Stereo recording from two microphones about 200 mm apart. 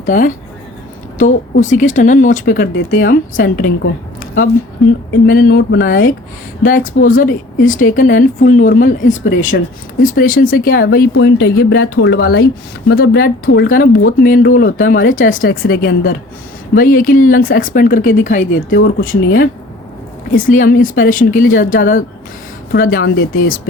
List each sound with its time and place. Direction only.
0.0 s speech: 40° left (ahead or behind)
5.2 s speech: 50° left (ahead or behind)
9.0 s speech: 75° left (ahead or behind)
10.2 s speech: 45° left (ahead or behind)
13.4 s speech: 70° left (ahead or behind)
13.7 s speech: 45° left (ahead or behind)